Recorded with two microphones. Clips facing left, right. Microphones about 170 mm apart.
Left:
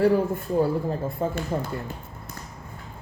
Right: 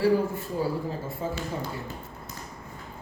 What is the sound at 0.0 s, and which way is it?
Speech, 55° left (ahead or behind).